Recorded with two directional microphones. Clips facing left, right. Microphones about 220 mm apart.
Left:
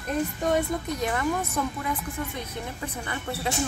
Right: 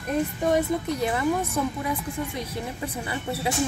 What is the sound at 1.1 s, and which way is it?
Speech, 10° right (ahead or behind).